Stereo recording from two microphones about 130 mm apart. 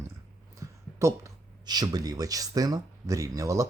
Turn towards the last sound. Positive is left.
turn(degrees=-25)  # may be behind; listen again after turning